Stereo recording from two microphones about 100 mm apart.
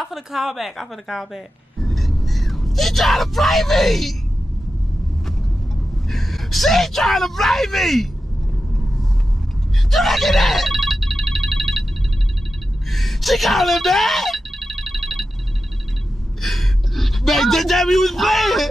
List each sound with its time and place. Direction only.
0.0 s speech: centre (ahead or behind)
6.0 s speech: centre (ahead or behind)
9.8 s telephone bell ringing: centre (ahead or behind)
12.9 s a sound: centre (ahead or behind)
16.3 s speech: centre (ahead or behind)